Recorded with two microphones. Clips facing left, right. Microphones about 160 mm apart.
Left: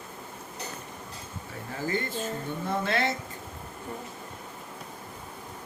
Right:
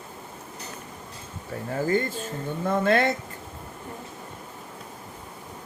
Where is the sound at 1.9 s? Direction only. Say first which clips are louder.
Right 3 dB; 45° right (ahead or behind).